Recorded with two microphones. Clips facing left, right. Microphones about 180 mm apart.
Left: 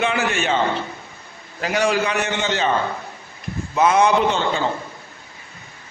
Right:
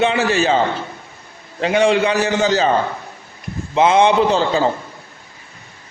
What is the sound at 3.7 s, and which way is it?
Speech, 25° right (ahead or behind).